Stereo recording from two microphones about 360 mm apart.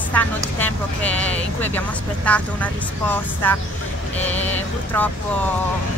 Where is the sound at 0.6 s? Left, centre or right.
Centre.